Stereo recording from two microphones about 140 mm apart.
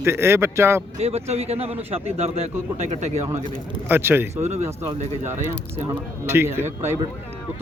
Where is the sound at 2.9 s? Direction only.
55° right (ahead or behind).